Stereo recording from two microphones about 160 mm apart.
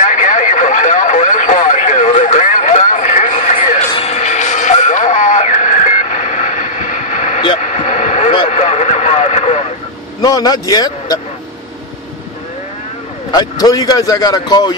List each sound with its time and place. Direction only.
0.0 s radio: 50° left (ahead or behind)
3.9 s music: 40° left (ahead or behind)
7.6 s heart sounds: 50° left (ahead or behind)
8.5 s radio: 45° left (ahead or behind)
10.2 s a man's voice: 25° left (ahead or behind)
13.3 s a man's voice: 25° left (ahead or behind)